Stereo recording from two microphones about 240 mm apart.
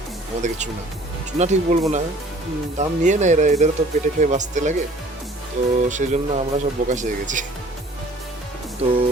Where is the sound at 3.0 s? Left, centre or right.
Right.